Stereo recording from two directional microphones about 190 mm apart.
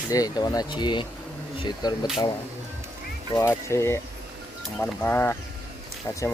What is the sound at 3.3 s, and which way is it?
Speech, 15° left (ahead or behind).